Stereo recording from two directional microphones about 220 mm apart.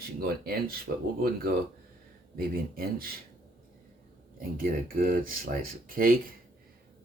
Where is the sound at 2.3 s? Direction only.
45° right (ahead or behind).